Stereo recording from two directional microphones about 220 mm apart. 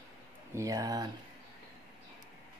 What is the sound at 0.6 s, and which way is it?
Speech, 15° right (ahead or behind).